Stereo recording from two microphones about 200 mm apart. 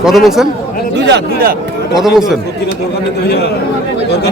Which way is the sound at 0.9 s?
60° right (ahead or behind).